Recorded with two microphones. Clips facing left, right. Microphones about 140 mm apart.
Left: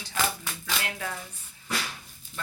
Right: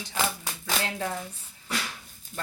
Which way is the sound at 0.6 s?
25° right (ahead or behind).